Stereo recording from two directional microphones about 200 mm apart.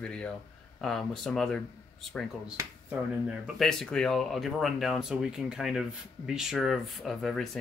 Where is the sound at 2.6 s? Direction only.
5° right (ahead or behind).